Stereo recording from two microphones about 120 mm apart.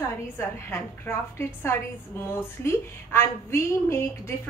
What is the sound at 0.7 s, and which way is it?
A woman's voice, 20° left (ahead or behind).